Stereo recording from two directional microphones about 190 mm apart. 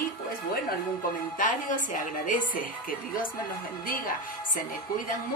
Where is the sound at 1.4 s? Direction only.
45° left (ahead or behind).